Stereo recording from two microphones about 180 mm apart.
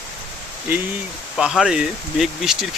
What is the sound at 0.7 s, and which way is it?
Speech, 10° right (ahead or behind).